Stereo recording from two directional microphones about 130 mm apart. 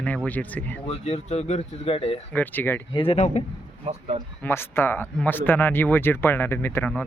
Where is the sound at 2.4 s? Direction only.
15° left (ahead or behind).